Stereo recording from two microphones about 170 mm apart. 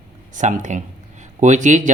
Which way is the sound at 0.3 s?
45° right (ahead or behind).